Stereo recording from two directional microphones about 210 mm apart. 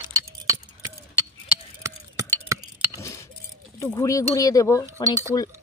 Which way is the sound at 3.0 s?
15° left (ahead or behind).